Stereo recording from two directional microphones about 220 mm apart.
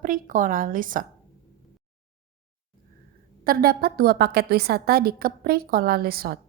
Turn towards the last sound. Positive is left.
turn(degrees=-45)  # may be behind; listen again after turning